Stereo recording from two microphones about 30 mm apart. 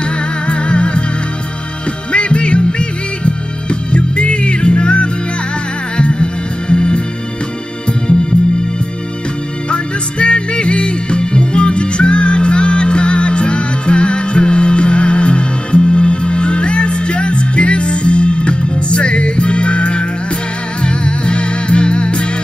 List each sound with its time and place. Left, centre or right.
0.0 s music: left
2.1 s music: left
9.7 s music: left